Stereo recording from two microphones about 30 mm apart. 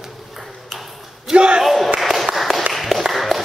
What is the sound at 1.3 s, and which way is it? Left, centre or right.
Battle cry, right.